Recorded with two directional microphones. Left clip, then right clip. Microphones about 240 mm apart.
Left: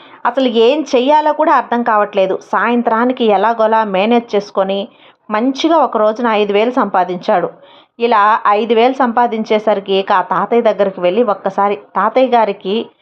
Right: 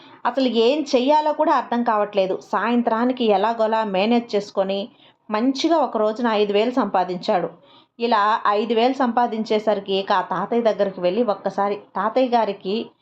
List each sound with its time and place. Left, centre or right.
0.2 s a woman's voice: centre